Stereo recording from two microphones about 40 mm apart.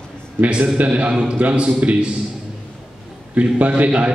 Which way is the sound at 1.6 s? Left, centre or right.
Right.